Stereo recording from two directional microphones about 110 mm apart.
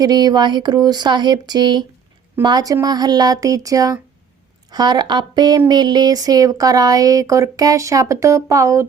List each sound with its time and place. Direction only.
0.0 s speech: 35° right (ahead or behind)